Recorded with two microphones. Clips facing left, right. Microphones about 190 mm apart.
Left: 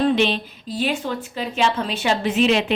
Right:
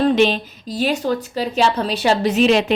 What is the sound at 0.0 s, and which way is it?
A woman's voice, 40° right (ahead or behind).